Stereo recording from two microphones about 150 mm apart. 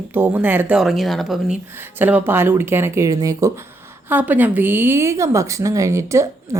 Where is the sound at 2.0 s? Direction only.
10° right (ahead or behind).